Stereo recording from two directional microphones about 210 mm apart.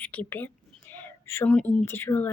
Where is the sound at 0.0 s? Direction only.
5° left (ahead or behind).